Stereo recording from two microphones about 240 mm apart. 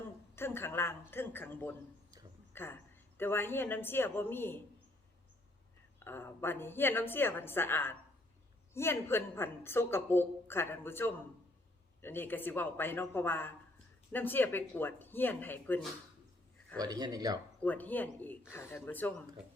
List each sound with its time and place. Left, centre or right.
0.3 s a woman's voice: centre
6.1 s a woman's voice: centre
16.7 s speech: centre
17.6 s a woman's voice: centre